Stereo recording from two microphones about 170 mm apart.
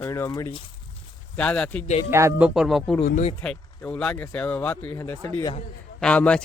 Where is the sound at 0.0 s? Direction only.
10° left (ahead or behind).